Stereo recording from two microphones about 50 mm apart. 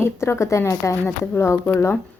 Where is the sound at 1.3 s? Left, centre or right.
Left.